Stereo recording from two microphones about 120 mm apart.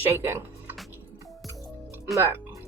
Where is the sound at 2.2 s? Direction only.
20° right (ahead or behind).